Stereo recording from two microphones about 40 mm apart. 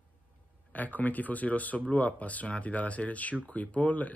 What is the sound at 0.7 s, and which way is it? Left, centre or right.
Speech, left.